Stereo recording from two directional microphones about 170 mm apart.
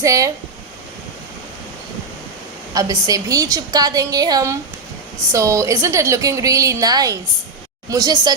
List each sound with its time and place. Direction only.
0.0 s a woman's voice: 20° right (ahead or behind)
2.7 s a woman's voice: 20° right (ahead or behind)